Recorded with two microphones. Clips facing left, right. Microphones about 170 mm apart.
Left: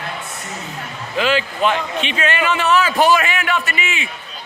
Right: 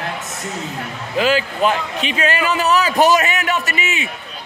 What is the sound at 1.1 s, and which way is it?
A man's voice, 40° right (ahead or behind).